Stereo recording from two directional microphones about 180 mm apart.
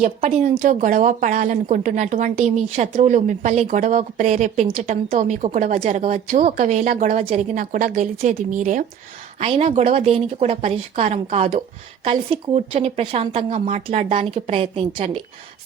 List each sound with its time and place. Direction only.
0.0 s speech: 40° right (ahead or behind)
9.4 s speech: 35° right (ahead or behind)